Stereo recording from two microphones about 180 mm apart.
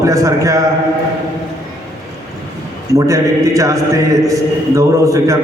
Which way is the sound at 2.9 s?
15° right (ahead or behind).